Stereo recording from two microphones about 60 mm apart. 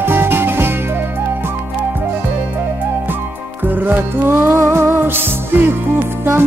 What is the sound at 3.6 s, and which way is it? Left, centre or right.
Music, right.